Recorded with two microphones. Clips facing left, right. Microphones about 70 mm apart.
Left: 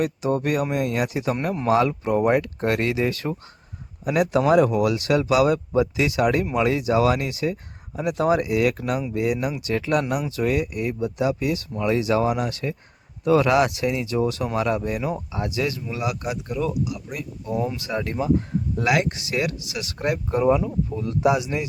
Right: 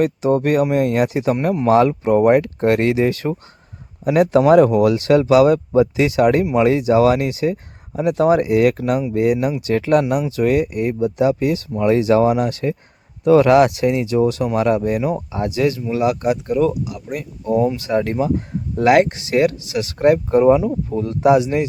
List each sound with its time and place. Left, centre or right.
0.0 s speech: right
10.0 s speech: right
17.5 s speech: centre
18.1 s speech: right